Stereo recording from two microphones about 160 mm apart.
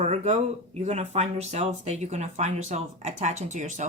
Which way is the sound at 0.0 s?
45° right (ahead or behind).